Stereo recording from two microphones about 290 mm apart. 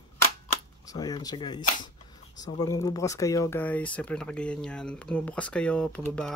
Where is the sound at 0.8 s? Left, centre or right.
Centre.